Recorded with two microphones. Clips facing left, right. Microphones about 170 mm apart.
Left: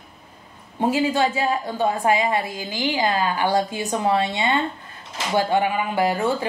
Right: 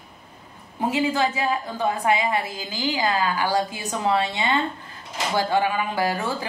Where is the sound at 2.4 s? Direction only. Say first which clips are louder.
Left 2 dB; 20° left (ahead or behind).